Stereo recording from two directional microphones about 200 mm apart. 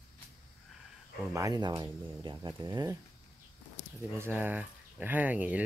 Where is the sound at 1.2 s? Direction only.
15° right (ahead or behind).